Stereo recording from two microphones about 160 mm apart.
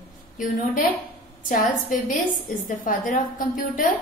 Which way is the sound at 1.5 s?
55° left (ahead or behind).